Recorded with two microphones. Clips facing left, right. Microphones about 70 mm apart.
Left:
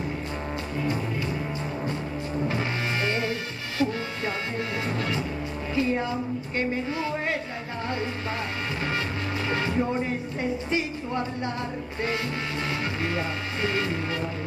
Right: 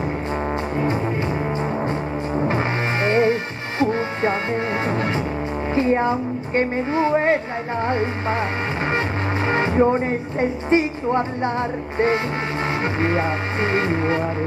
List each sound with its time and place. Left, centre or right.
2.3 s music: right
5.8 s a woman's voice: right
7.8 s music: right
9.5 s speech: right
13.0 s speech: right